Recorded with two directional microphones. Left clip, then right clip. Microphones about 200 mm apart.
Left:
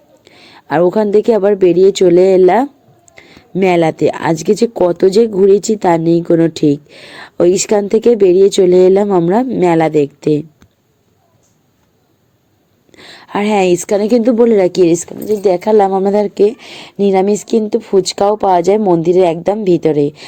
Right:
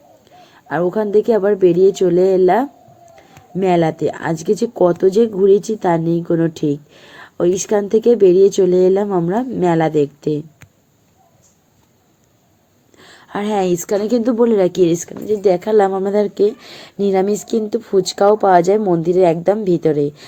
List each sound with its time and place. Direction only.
0.3 s a woman's voice: 25° left (ahead or behind)
13.0 s a woman's voice: 25° left (ahead or behind)